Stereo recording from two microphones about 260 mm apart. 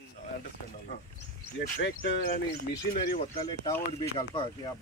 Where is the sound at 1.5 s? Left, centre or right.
Left.